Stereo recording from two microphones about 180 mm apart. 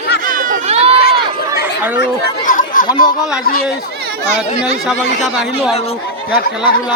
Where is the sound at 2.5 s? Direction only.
50° left (ahead or behind).